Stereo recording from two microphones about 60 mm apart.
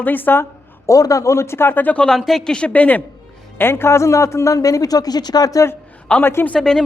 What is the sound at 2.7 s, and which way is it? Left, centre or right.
Speech, left.